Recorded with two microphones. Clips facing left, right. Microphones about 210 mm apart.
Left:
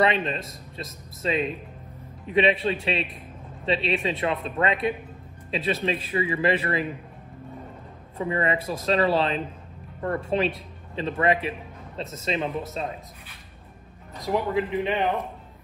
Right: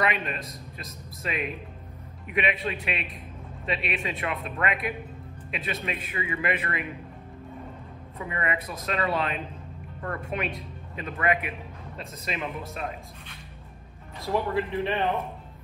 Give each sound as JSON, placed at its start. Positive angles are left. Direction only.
{"t": 0.0, "sound": "speech", "side_deg": 30}
{"t": 8.2, "sound": "speech", "side_deg": 30}
{"t": 14.2, "sound": "a man's voice", "side_deg": 15}